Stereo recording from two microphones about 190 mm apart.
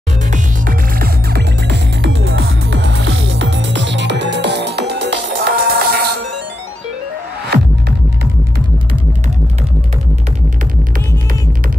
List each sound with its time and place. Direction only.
0.3 s music: 50° right (ahead or behind)